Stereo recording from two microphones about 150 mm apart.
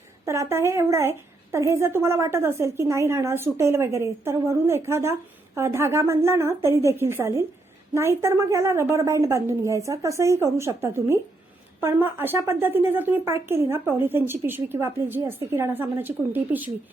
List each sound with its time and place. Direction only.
0.3 s a woman's voice: 20° right (ahead or behind)